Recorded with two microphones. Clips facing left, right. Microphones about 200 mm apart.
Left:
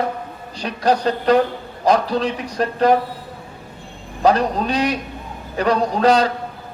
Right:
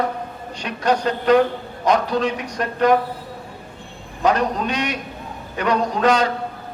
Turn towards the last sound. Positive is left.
turn(degrees=35)  # may be behind; listen again after turning